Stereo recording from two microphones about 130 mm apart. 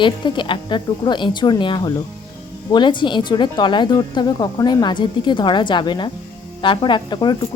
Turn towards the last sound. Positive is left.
turn(degrees=35)  # may be behind; listen again after turning